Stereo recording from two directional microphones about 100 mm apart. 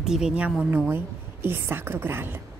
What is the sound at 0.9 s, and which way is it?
A woman's voice, 20° right (ahead or behind).